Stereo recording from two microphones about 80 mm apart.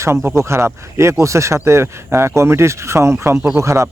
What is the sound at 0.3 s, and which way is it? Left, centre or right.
Speech, right.